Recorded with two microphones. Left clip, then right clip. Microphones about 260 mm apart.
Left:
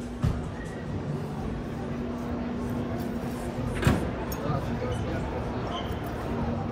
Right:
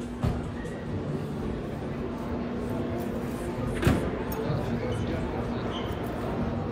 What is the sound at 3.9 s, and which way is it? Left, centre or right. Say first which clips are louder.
Music: even; left.